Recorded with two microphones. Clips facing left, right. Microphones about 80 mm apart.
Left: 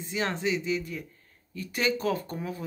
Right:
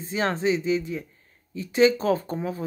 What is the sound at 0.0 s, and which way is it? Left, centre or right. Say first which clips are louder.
Speech: right 5 dB; right.